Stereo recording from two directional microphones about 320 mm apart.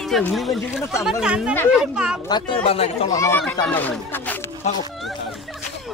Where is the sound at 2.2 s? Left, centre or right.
Centre.